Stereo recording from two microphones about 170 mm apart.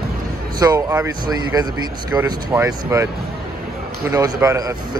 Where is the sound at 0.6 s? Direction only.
20° right (ahead or behind).